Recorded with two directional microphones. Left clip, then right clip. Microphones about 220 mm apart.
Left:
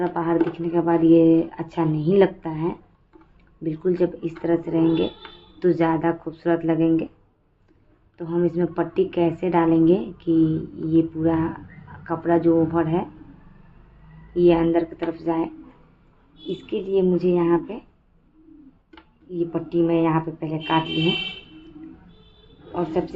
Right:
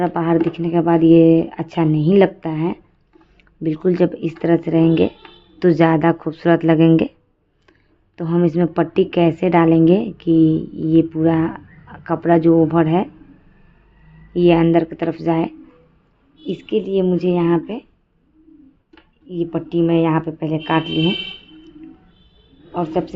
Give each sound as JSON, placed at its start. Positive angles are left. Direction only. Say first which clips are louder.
{"t": 0.0, "sound": "a woman's voice", "louder": "right 4 dB", "side_deg": -45}
{"t": 8.1, "sound": "a woman's voice", "louder": "right 5 dB", "side_deg": -50}
{"t": 14.3, "sound": "a woman's voice", "louder": "right 4 dB", "side_deg": -50}
{"t": 16.5, "sound": "a woman's voice", "louder": "right 5 dB", "side_deg": -50}
{"t": 19.3, "sound": "a woman's voice", "louder": "right 3 dB", "side_deg": -45}
{"t": 22.7, "sound": "a woman's voice", "louder": "right 4 dB", "side_deg": -45}